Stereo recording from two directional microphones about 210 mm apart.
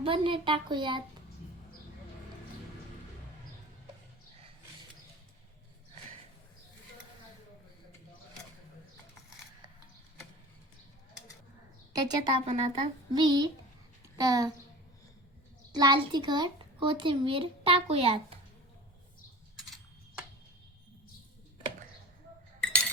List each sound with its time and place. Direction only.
0.0 s a child's voice: 25° right (ahead or behind)
11.9 s a child's voice: 20° right (ahead or behind)
15.7 s a child's voice: 20° right (ahead or behind)